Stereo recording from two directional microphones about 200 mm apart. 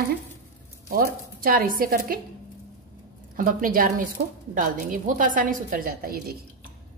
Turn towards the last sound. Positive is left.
turn(degrees=-45)  # may be behind; listen again after turning